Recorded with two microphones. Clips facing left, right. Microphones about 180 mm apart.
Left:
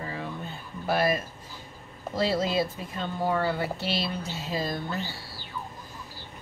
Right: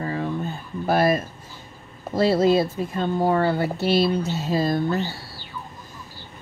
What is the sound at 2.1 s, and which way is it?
Speech, 50° right (ahead or behind).